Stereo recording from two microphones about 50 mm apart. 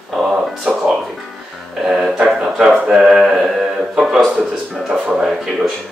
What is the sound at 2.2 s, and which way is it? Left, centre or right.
A man's voice, centre.